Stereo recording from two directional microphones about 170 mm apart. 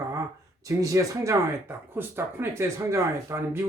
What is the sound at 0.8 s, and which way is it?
Speech, 20° right (ahead or behind).